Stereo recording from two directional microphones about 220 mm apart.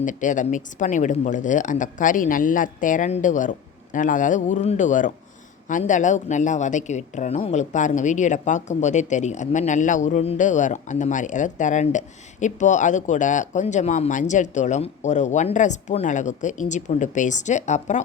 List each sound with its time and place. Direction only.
0.0 s a woman's voice: 35° left (ahead or behind)